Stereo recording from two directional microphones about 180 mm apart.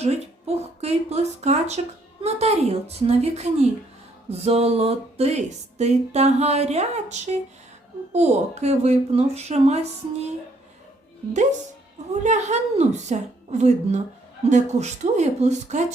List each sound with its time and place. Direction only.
0.0 s speech: 35° right (ahead or behind)
12.2 s speech: 40° right (ahead or behind)